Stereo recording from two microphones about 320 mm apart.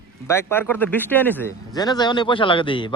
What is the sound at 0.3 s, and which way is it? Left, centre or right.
Speech, centre.